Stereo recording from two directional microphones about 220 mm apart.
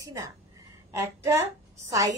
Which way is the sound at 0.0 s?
15° right (ahead or behind).